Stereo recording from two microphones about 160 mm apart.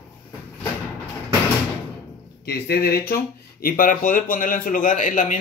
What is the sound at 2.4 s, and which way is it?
Speech, 90° left.